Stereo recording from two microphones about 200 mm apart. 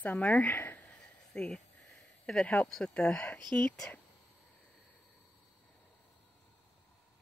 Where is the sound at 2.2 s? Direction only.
5° left (ahead or behind).